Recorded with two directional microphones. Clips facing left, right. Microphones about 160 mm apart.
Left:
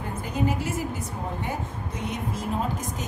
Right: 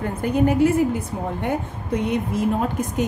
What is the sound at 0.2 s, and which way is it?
A woman's voice, 60° right (ahead or behind).